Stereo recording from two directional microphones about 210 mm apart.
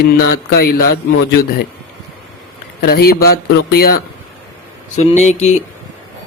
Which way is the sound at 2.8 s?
45° left (ahead or behind).